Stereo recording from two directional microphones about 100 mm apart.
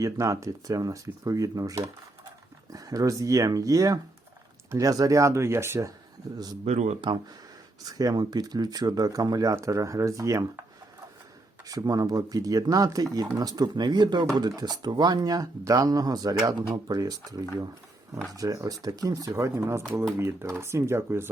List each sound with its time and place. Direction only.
0.0 s speech: 35° right (ahead or behind)
6.3 s speech: 40° right (ahead or behind)
7.0 s speech: 55° right (ahead or behind)
7.9 s speech: 40° right (ahead or behind)
11.7 s speech: 40° right (ahead or behind)